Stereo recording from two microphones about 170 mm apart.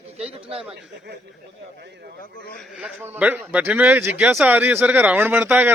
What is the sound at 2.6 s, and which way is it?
Speech, 5° right (ahead or behind).